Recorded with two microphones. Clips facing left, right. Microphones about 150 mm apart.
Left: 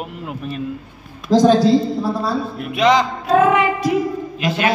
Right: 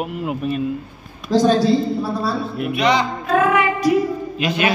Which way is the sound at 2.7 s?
90° left.